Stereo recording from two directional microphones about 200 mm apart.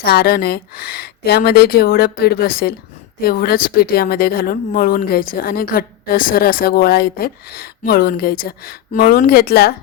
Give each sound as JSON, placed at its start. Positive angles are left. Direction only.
{"t": 0.0, "sound": "speech", "side_deg": 50}